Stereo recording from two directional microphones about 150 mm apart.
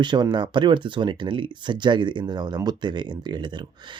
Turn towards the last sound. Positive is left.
turn(degrees=-30)  # may be behind; listen again after turning